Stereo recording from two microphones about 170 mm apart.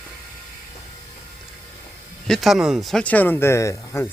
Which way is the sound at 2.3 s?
Centre (ahead or behind).